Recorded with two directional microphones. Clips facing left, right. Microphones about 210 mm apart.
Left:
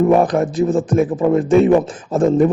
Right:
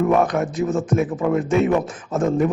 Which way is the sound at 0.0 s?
30° left (ahead or behind).